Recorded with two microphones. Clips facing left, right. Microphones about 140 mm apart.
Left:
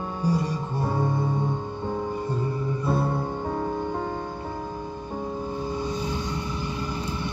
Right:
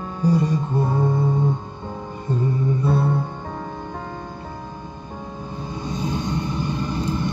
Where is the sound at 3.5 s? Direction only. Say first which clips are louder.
Left 4 dB; 25° left (ahead or behind).